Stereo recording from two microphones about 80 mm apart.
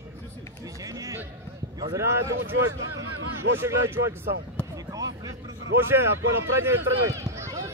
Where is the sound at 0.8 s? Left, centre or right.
Right.